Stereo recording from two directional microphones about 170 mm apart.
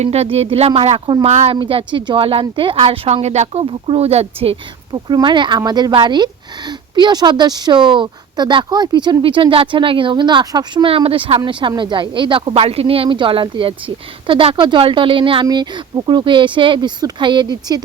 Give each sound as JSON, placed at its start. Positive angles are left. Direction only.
{"t": 0.0, "sound": "a woman's voice", "side_deg": -40}